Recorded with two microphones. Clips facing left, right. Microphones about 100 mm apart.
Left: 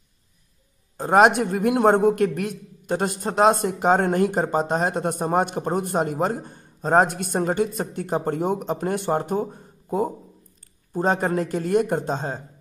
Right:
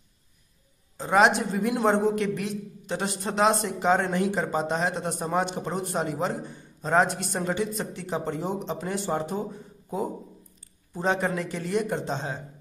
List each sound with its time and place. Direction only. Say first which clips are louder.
0.9 s a man's voice: left 4 dB; 50° left (ahead or behind)